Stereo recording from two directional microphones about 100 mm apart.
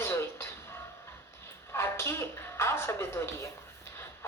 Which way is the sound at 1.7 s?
25° left (ahead or behind).